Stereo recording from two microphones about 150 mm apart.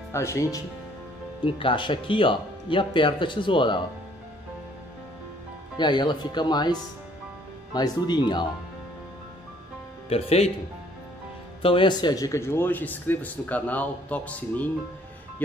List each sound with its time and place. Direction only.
0.1 s speech: 20° left (ahead or behind)
1.4 s speech: 35° left (ahead or behind)
5.8 s speech: 30° left (ahead or behind)
10.0 s speech: 40° left (ahead or behind)
11.6 s a man's voice: 35° left (ahead or behind); by 14.7 s 10° left (ahead or behind)